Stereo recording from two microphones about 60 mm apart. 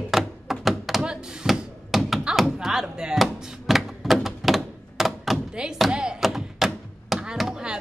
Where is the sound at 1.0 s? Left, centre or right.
Centre.